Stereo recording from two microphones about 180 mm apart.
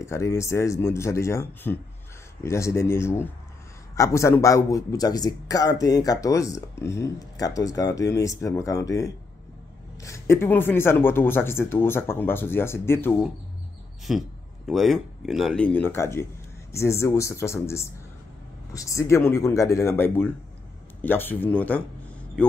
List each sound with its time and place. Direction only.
0.0 s a man's voice: 15° left (ahead or behind)
14.1 s a man's voice: centre (ahead or behind)